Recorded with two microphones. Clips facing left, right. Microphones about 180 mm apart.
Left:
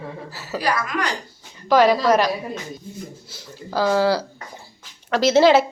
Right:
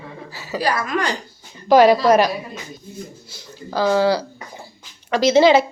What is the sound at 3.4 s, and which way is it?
A woman's voice, 5° left (ahead or behind).